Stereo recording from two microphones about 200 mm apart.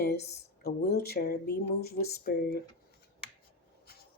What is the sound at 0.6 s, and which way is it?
Speech, 50° left (ahead or behind).